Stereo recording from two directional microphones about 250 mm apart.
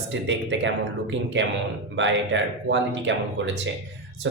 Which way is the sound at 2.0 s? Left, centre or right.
Right.